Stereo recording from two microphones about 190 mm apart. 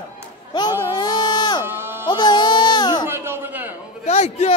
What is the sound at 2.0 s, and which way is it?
Music, 25° left (ahead or behind).